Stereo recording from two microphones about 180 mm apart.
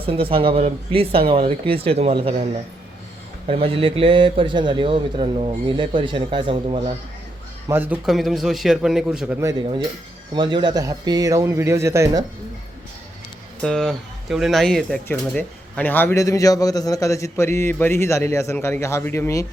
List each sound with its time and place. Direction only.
0.0 s a man's voice: 30° right (ahead or behind)
7.7 s a man's voice: 10° right (ahead or behind)
10.3 s a man's voice: 25° right (ahead or behind)
13.6 s a man's voice: 5° left (ahead or behind)